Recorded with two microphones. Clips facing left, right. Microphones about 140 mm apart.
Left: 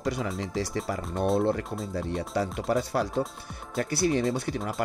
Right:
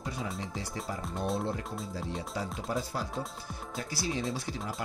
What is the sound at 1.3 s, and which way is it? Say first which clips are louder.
Speech: left 8 dB; 65° left (ahead or behind).